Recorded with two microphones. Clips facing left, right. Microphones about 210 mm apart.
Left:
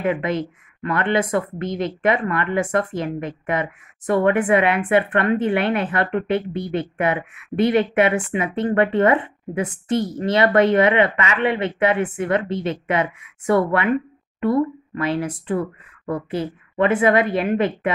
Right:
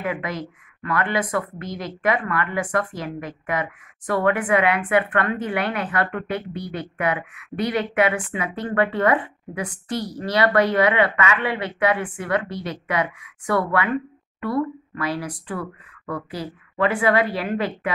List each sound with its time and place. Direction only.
0.0 s speech: 25° left (ahead or behind)